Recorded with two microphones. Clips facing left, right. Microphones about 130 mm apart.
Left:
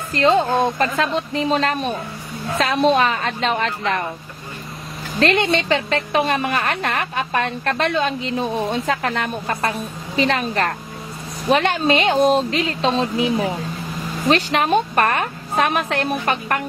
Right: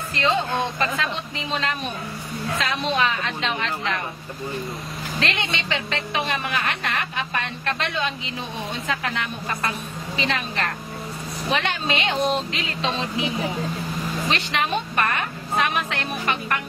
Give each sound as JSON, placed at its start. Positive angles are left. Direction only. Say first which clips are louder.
{"t": 0.1, "sound": "a woman's voice", "louder": "left 7 dB", "side_deg": 45}
{"t": 5.2, "sound": "a woman's voice", "louder": "left 11 dB", "side_deg": 50}
{"t": 14.3, "sound": "a woman's voice", "louder": "left 9 dB", "side_deg": 40}